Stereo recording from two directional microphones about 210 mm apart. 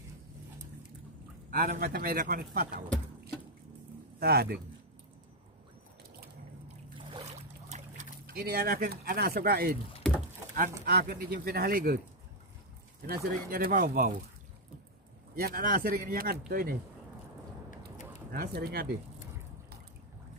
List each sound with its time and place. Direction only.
1.5 s speech: 45° right (ahead or behind)
4.2 s speech: 45° right (ahead or behind)
7.1 s boat: 25° right (ahead or behind); by 9.8 s 45° right (ahead or behind)
10.9 s speech: 45° right (ahead or behind)
13.0 s speech: 45° right (ahead or behind)
15.3 s speech: 45° right (ahead or behind)
18.3 s speech: 50° right (ahead or behind)